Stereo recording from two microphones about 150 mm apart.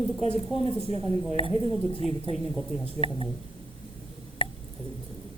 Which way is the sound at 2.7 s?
55° left (ahead or behind).